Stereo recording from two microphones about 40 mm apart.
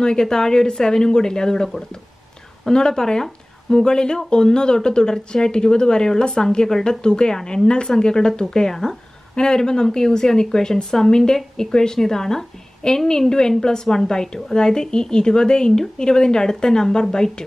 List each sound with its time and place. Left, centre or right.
0.0 s speech: centre
2.7 s speech: centre